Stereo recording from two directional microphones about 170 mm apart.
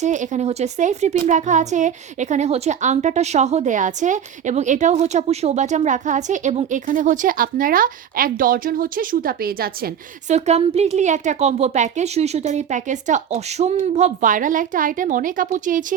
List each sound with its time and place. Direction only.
0.0 s speech: 45° right (ahead or behind); by 9.9 s 60° right (ahead or behind)
10.2 s speech: 40° right (ahead or behind)